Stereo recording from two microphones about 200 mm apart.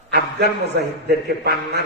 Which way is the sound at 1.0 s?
55° right (ahead or behind).